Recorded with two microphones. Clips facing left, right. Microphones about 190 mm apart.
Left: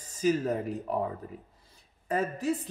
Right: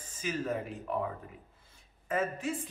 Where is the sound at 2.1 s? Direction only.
35° left (ahead or behind).